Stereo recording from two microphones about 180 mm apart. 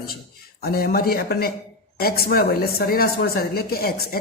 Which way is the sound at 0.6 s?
55° left (ahead or behind).